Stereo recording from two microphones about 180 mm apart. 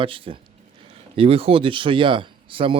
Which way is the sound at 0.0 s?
30° right (ahead or behind).